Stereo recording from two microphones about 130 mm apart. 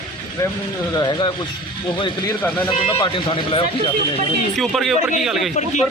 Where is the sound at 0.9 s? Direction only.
35° left (ahead or behind).